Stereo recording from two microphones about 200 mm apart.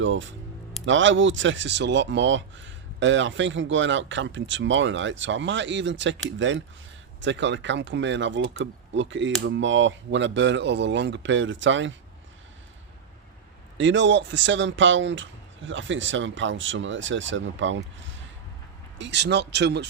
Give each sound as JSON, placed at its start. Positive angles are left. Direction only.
{"t": 0.0, "sound": "speech", "side_deg": -70}
{"t": 13.7, "sound": "speech", "side_deg": -65}